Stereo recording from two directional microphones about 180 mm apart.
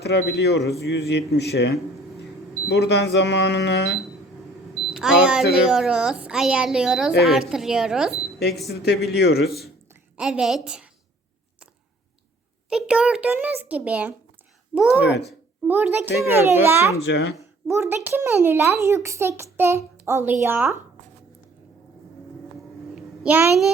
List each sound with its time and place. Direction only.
0.0 s a man's voice: 70° left (ahead or behind)
4.9 s a woman's voice: 5° right (ahead or behind)
8.8 s a man's voice: 65° left (ahead or behind)
9.9 s a woman's voice: 5° right (ahead or behind)
12.7 s a child's voice: 5° right (ahead or behind)
15.3 s a child's voice: 10° right (ahead or behind)
17.0 s speech: 70° left (ahead or behind)
17.7 s a child's voice: 15° right (ahead or behind)
23.0 s a sound: 5° right (ahead or behind)